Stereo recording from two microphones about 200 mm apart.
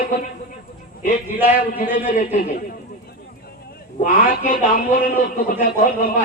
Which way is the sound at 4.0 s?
40° left (ahead or behind).